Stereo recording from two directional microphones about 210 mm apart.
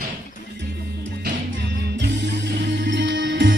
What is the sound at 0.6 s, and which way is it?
Music, 55° right (ahead or behind).